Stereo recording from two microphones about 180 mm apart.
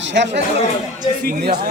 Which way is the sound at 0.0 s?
80° right.